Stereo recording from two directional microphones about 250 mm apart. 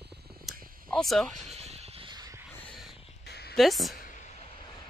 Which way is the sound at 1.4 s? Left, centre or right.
Right.